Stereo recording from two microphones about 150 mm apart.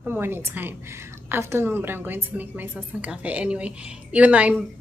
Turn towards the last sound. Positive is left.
turn(degrees=-10)  # may be behind; listen again after turning